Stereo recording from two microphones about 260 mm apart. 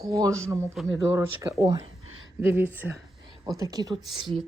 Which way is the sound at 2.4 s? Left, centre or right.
Centre.